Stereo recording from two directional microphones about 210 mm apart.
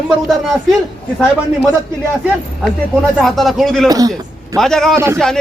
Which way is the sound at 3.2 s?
Centre (ahead or behind).